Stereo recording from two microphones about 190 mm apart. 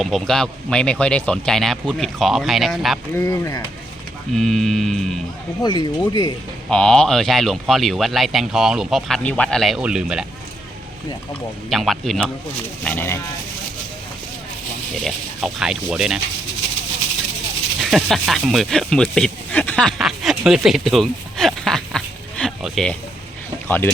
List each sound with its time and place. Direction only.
0.0 s speech: centre (ahead or behind)
3.1 s speech: 15° left (ahead or behind)
4.4 s speech: centre (ahead or behind)
5.6 s speech: 25° left (ahead or behind)
6.7 s speech: 5° left (ahead or behind)
11.7 s speech: centre (ahead or behind)
15.0 s speech: centre (ahead or behind)
17.7 s speech: centre (ahead or behind)